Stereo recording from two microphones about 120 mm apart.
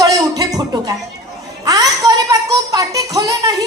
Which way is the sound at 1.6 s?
30° right (ahead or behind).